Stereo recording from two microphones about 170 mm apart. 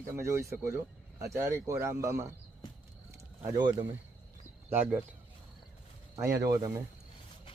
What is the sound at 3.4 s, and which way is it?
Speech, 20° right (ahead or behind).